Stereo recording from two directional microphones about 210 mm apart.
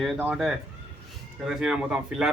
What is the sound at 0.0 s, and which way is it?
A man's voice, 5° right (ahead or behind).